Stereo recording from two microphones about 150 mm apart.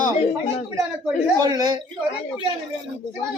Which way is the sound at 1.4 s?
25° right (ahead or behind).